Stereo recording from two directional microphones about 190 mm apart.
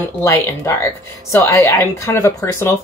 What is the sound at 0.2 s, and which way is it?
A woman's voice, 15° left (ahead or behind).